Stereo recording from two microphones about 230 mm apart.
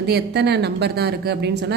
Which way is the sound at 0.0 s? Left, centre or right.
Right.